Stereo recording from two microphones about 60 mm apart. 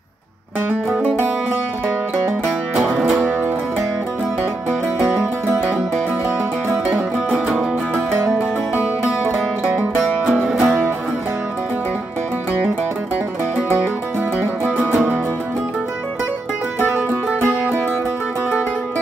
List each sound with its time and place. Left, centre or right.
4.9 s music: centre
10.2 s music: centre